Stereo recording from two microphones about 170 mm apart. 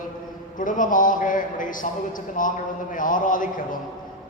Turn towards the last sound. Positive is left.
turn(degrees=50)  # may be behind; listen again after turning